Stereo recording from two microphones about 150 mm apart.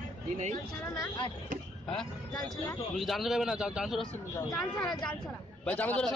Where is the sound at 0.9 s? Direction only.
30° left (ahead or behind).